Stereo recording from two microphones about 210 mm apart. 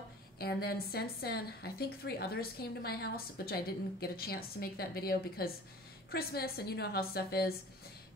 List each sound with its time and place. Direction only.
0.4 s a woman's voice: 50° left (ahead or behind)